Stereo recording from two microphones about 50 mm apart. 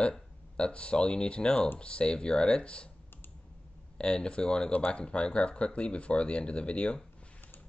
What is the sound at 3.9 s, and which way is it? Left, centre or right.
Speech, centre.